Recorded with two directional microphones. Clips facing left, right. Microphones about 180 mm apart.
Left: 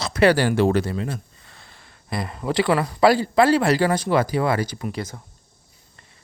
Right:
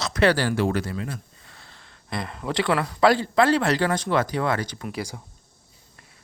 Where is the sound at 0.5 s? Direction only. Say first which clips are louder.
Left 5 dB; 25° left (ahead or behind).